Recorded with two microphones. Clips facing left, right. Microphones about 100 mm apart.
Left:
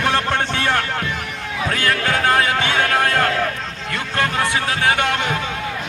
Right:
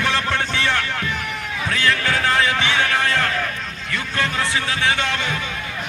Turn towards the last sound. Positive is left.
turn(degrees=55)  # may be behind; listen again after turning